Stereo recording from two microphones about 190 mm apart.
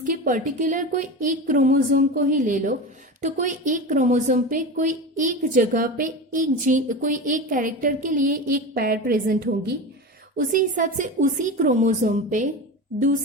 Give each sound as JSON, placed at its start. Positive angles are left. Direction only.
{"t": 0.0, "sound": "a woman's voice", "side_deg": -45}